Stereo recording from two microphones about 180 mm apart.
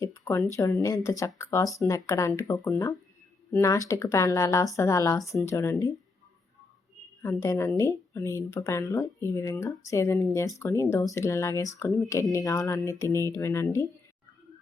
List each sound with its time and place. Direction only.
0.0 s speech: 15° left (ahead or behind)
7.2 s speech: 15° left (ahead or behind)